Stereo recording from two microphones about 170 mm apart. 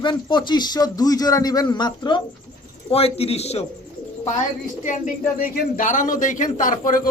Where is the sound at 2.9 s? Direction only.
35° left (ahead or behind).